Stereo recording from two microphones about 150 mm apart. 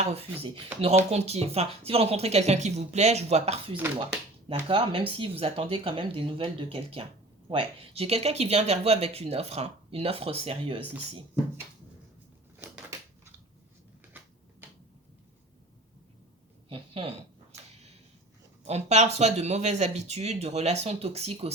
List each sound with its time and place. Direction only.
0.0 s speech: 45° right (ahead or behind)
12.5 s crushing: 10° right (ahead or behind)
16.6 s a woman's voice: 40° right (ahead or behind)
18.6 s speech: 45° right (ahead or behind)